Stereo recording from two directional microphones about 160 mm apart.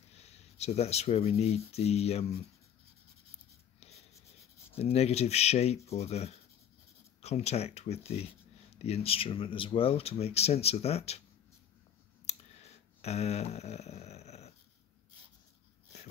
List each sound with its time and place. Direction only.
0.1 s speech: 40° left (ahead or behind)
4.7 s speech: 40° left (ahead or behind)
12.3 s a sound: 40° left (ahead or behind)